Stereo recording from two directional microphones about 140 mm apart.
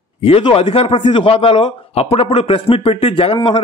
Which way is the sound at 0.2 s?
40° left (ahead or behind).